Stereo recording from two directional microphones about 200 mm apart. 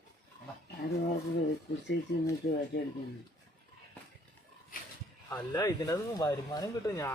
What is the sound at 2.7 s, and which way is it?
Speech, 65° left (ahead or behind).